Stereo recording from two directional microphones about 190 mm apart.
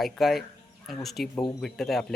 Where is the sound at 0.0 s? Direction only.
Centre (ahead or behind).